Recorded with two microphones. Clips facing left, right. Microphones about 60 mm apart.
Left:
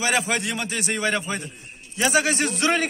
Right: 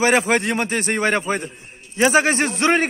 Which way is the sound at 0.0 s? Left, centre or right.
Right.